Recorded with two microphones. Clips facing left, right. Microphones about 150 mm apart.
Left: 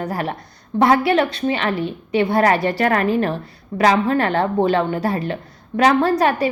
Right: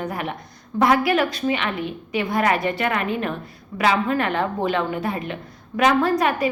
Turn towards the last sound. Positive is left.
turn(degrees=35)  # may be behind; listen again after turning